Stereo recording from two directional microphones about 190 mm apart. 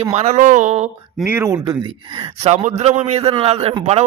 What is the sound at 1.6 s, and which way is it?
A man's voice, 25° right (ahead or behind).